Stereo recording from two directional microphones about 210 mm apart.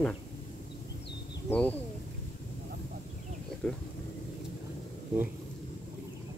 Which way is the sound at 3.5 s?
5° left (ahead or behind).